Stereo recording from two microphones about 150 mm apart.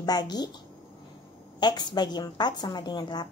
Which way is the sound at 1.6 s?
30° left (ahead or behind).